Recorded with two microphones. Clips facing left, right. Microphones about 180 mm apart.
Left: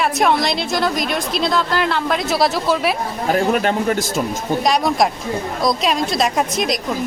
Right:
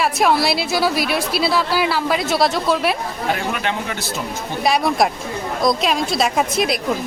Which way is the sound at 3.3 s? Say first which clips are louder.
Left 6 dB; 40° left (ahead or behind).